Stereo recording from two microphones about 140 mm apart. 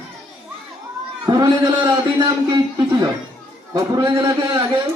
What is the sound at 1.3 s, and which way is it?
Speech, 25° right (ahead or behind).